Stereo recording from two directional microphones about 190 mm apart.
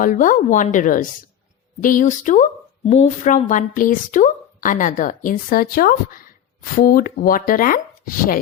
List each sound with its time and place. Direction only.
0.0 s speech: 45° left (ahead or behind)